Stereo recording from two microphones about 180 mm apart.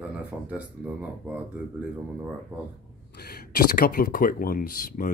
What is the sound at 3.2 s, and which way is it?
Speech, 60° left (ahead or behind).